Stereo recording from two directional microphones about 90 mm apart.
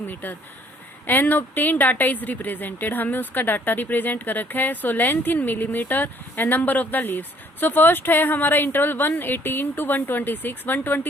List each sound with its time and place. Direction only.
0.1 s a woman's voice: 20° left (ahead or behind)